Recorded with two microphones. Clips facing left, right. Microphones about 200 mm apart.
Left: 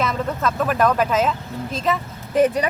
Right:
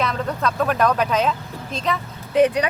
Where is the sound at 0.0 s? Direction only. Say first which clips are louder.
Left 1 dB; centre (ahead or behind).